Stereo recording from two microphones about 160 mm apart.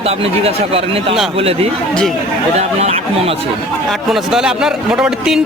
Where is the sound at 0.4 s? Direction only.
35° right (ahead or behind).